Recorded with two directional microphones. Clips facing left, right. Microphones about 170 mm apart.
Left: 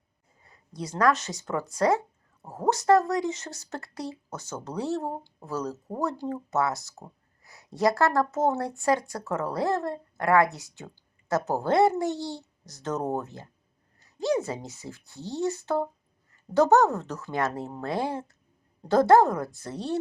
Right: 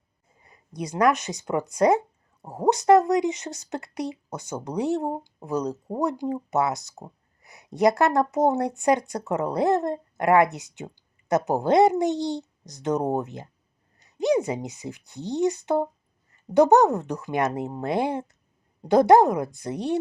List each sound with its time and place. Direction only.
0.4 s speech: 15° right (ahead or behind)